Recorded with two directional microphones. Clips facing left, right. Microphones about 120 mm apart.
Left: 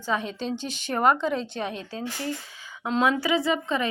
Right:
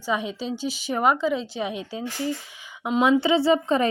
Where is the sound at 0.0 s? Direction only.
10° right (ahead or behind).